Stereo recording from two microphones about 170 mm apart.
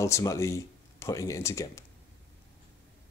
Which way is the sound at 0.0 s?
15° left (ahead or behind).